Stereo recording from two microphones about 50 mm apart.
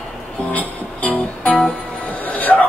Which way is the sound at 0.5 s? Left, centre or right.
Left.